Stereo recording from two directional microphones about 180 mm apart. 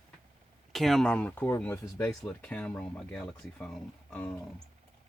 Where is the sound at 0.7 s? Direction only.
Centre (ahead or behind).